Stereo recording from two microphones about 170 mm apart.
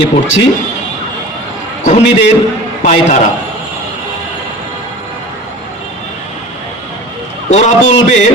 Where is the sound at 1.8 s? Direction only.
40° left (ahead or behind).